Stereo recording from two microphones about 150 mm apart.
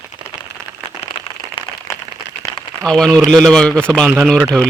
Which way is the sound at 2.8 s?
5° left (ahead or behind).